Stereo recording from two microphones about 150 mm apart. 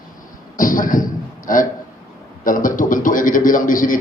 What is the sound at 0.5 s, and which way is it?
Beatboxing, 65° left (ahead or behind).